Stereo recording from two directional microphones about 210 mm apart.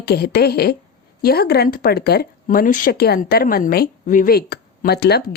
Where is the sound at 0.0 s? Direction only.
50° left (ahead or behind).